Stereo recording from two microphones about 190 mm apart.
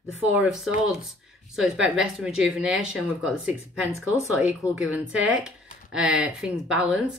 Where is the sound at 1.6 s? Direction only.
5° right (ahead or behind).